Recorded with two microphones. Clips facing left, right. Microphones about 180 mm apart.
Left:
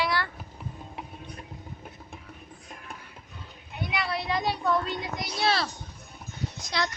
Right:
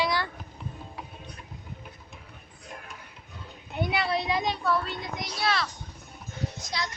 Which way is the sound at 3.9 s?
25° right (ahead or behind).